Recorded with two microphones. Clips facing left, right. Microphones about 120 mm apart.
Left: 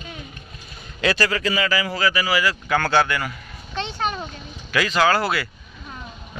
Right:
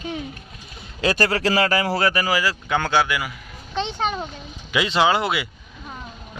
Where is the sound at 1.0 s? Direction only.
40° right (ahead or behind).